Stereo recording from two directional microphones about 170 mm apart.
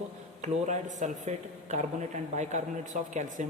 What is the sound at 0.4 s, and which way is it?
A woman's voice, 45° right (ahead or behind).